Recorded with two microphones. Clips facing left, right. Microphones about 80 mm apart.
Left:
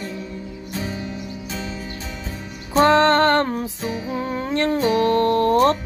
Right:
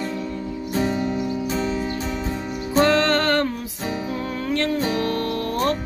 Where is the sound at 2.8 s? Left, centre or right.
Left.